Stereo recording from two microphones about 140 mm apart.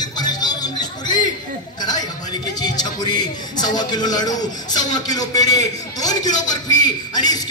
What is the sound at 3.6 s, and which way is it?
A man's voice, 30° left (ahead or behind).